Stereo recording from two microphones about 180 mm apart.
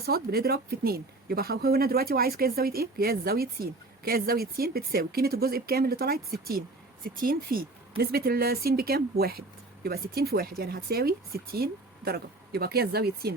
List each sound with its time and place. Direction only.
0.0 s speech: 60° right (ahead or behind)